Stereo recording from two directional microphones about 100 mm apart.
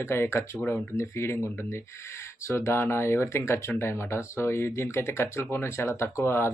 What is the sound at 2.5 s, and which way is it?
Speech, 25° left (ahead or behind).